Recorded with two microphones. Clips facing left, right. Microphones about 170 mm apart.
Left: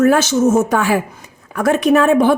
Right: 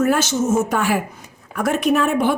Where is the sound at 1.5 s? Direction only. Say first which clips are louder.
Left 5 dB; 90° left.